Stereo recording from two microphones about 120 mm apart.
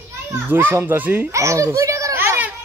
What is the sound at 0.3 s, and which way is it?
A child's voice, 20° right (ahead or behind).